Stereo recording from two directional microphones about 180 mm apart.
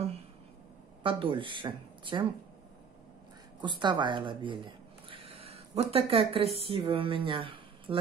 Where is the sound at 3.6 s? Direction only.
25° right (ahead or behind).